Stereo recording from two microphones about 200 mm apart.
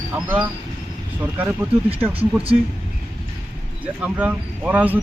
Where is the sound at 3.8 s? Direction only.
5° right (ahead or behind).